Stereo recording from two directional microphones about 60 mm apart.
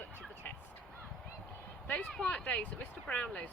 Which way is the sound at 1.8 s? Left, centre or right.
Left.